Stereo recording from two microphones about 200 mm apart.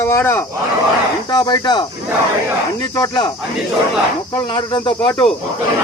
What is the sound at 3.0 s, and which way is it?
Speech, 20° left (ahead or behind).